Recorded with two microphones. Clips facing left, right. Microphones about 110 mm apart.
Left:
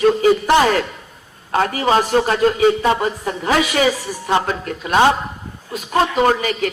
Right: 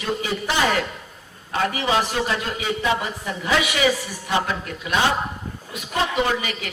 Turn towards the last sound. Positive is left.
turn(degrees=45)  # may be behind; listen again after turning